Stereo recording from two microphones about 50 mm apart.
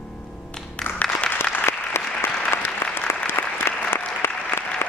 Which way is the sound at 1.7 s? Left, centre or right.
Left.